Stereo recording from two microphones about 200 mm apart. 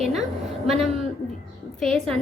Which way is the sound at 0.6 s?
Centre (ahead or behind).